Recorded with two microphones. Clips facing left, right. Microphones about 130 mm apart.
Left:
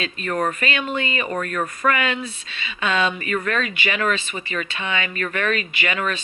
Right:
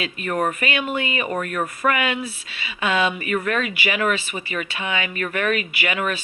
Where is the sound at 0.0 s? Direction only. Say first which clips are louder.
Even; 15° right (ahead or behind).